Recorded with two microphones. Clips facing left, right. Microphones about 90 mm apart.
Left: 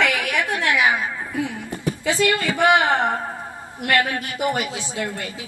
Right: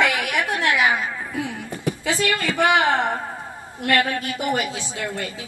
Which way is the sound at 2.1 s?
20° left (ahead or behind).